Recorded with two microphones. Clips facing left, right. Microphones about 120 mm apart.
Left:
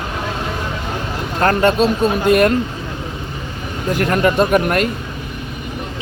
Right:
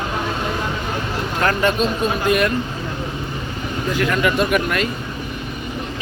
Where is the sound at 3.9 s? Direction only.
45° left (ahead or behind).